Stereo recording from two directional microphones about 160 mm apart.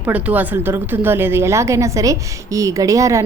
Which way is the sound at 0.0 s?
10° right (ahead or behind).